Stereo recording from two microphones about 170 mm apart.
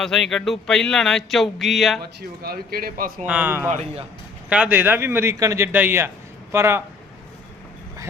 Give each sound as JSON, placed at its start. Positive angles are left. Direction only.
{"t": 0.0, "sound": "speech", "side_deg": 0}
{"t": 2.4, "sound": "a man's voice", "side_deg": -60}
{"t": 3.2, "sound": "a man's voice", "side_deg": -10}